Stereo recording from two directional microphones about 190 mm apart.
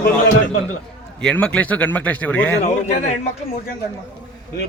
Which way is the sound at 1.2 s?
5° left (ahead or behind).